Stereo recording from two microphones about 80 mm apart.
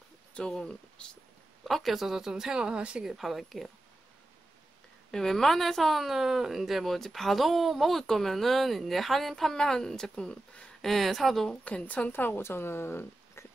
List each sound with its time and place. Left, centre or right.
0.3 s speech: centre
1.7 s a woman's voice: centre
3.1 s a woman's voice: centre
5.1 s a woman's voice: centre
11.6 s a woman's voice: centre